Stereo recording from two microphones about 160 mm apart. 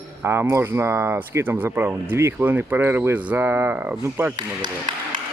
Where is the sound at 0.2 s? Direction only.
15° right (ahead or behind).